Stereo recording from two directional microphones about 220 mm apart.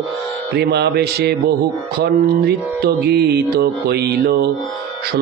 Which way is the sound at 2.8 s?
45° right (ahead or behind).